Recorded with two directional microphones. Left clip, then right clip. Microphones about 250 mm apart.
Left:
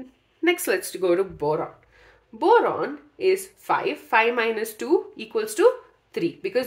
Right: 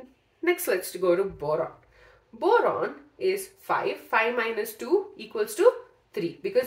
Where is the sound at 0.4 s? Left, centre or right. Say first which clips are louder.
Left 3 dB; left.